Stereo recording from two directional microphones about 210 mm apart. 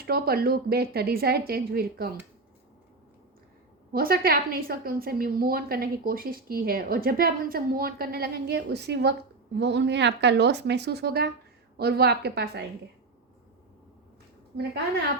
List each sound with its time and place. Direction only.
0.0 s a woman's voice: 45° right (ahead or behind)
3.9 s a woman's voice: 45° right (ahead or behind)